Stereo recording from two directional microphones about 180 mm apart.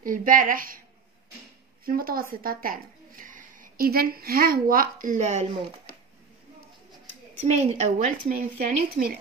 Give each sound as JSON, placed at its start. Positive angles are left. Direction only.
{"t": 0.0, "sound": "a woman's voice", "side_deg": -50}
{"t": 1.9, "sound": "a woman's voice", "side_deg": -55}
{"t": 7.3, "sound": "a woman's voice", "side_deg": -40}